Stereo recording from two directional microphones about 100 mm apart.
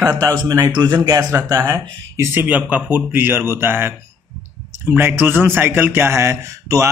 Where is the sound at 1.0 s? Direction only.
35° right (ahead or behind).